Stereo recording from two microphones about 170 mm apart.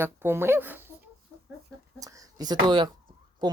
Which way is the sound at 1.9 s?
20° right (ahead or behind).